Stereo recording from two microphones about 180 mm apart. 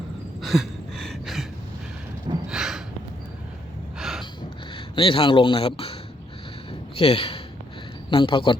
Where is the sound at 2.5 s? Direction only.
5° right (ahead or behind).